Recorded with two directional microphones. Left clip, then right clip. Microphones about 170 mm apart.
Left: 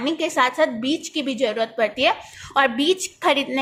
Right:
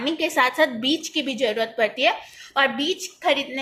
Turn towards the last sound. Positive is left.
turn(degrees=35)  # may be behind; listen again after turning